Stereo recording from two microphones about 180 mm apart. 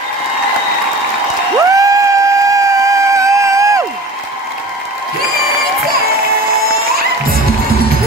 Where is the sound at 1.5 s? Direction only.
20° right (ahead or behind).